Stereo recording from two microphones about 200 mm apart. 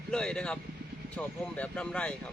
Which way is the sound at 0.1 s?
5° left (ahead or behind).